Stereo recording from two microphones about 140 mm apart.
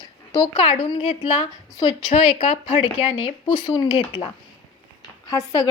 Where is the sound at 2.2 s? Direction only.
60° left (ahead or behind).